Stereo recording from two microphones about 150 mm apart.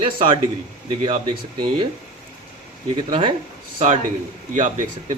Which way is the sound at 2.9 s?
35° right (ahead or behind).